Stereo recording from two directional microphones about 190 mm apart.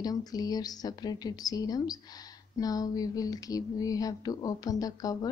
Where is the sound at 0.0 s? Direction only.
20° left (ahead or behind).